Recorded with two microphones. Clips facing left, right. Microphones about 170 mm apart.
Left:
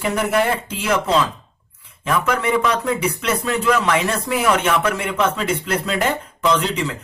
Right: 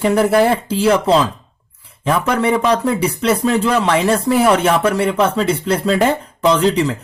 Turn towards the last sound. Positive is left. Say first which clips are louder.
# right 6 dB
turn(degrees=-35)  # may be behind; listen again after turning